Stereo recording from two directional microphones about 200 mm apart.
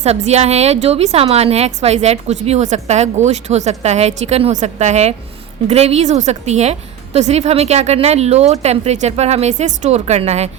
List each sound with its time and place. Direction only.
0.0 s a woman's voice: 35° right (ahead or behind)